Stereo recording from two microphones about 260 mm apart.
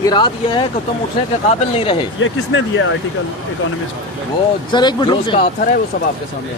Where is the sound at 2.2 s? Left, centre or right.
Left.